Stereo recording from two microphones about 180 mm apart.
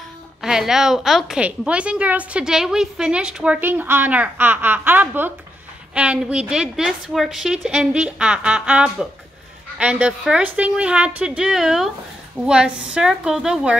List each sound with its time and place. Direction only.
0.4 s a woman's voice: 5° right (ahead or behind)